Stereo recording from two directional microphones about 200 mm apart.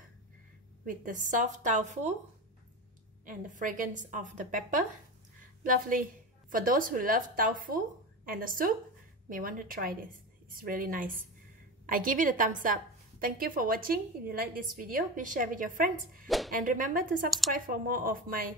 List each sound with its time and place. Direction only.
0.8 s a woman's voice: 40° right (ahead or behind)
3.5 s a woman's voice: 40° right (ahead or behind)
16.3 s speech: centre (ahead or behind)
16.5 s a woman's voice: 40° right (ahead or behind)